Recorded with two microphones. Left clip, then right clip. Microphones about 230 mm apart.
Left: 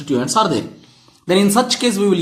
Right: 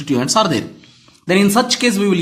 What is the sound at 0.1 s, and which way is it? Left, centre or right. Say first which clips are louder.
Speech: right 1 dB; right.